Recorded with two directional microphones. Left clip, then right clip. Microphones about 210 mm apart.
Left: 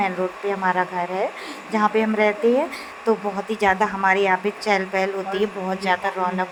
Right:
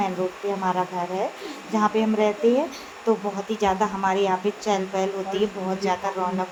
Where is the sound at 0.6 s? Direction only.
20° left (ahead or behind).